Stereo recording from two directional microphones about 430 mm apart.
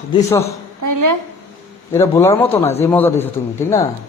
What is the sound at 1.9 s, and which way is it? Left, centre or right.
Speech, centre.